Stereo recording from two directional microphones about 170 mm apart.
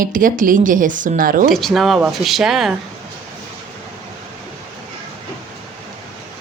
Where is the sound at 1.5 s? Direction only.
Centre (ahead or behind).